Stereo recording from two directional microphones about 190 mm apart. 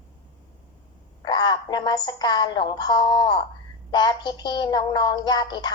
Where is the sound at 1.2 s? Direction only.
25° left (ahead or behind).